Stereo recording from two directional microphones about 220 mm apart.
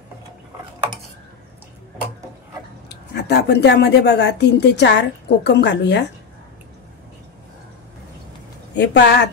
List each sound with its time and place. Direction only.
2.9 s a woman's voice: 50° left (ahead or behind)
8.7 s a woman's voice: 50° left (ahead or behind)